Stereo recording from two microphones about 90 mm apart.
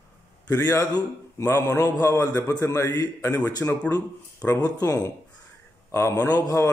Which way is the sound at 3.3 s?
45° left (ahead or behind).